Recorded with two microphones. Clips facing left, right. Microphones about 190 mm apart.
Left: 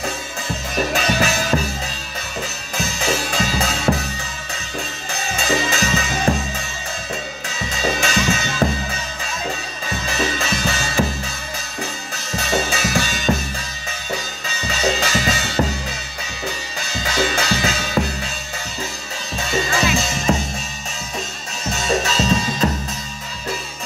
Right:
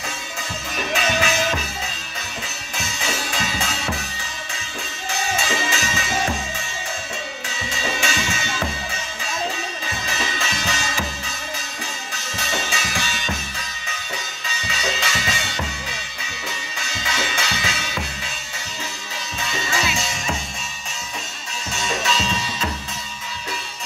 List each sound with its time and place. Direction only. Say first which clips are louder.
0.7 s music: left 3 dB; 40° left (ahead or behind)
2.8 s drum kit: left 6 dB; 40° left (ahead or behind)
5.5 s music: left 5 dB; 40° left (ahead or behind)
7.8 s music: left 6 dB; 40° left (ahead or behind)
10.0 s music: left 6 dB; 40° left (ahead or behind)
12.4 s music: left 7 dB; 40° left (ahead or behind)
14.7 s music: left 7 dB; 40° left (ahead or behind)
17.0 s music: left 6 dB; 40° left (ahead or behind)
19.5 s music: left 6 dB; 40° left (ahead or behind)
21.6 s music: left 5 dB; 40° left (ahead or behind)